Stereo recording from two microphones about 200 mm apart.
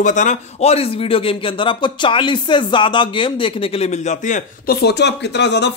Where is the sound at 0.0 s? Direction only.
40° left (ahead or behind).